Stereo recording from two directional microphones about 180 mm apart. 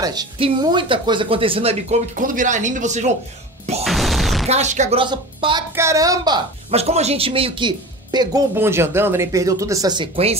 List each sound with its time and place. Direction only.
0.0 s speech: 20° right (ahead or behind)
2.1 s speech: 50° right (ahead or behind)
3.8 s music: centre (ahead or behind)
4.5 s speech: 40° right (ahead or behind)
5.0 s speech: 25° right (ahead or behind)
6.7 s speech: 35° right (ahead or behind)